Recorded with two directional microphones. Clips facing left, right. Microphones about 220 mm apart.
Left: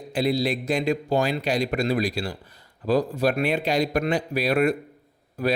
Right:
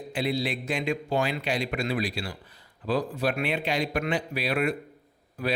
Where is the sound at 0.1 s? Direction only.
40° left (ahead or behind).